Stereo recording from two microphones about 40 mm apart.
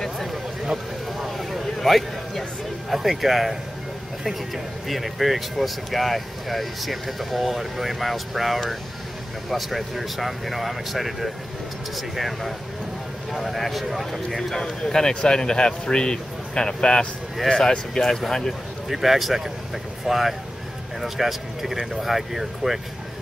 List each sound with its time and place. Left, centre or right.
1.1 s a sound: centre
2.9 s speech: centre
4.8 s speech: centre
14.1 s speech: centre
18.9 s speech: centre